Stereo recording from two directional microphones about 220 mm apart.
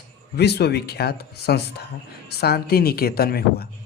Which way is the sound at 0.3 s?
50° left (ahead or behind).